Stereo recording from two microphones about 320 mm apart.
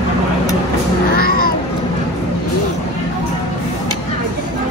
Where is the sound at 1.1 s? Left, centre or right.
Left.